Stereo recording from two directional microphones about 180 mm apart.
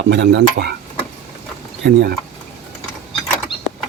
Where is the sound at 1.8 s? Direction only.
60° right (ahead or behind).